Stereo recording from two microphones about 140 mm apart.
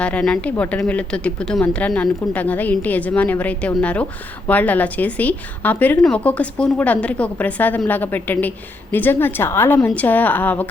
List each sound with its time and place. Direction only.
0.0 s a woman's voice: 5° left (ahead or behind)